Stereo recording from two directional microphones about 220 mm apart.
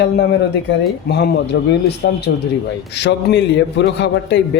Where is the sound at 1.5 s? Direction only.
55° left (ahead or behind).